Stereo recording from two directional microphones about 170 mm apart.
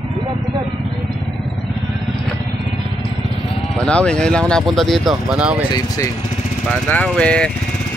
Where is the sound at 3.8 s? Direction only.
5° left (ahead or behind).